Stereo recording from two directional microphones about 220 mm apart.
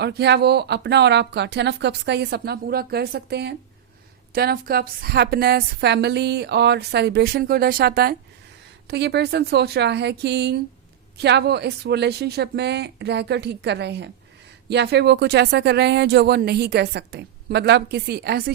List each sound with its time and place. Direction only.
0.0 s speech: 50° right (ahead or behind)